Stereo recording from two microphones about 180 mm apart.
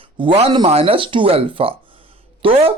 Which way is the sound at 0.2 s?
30° right (ahead or behind).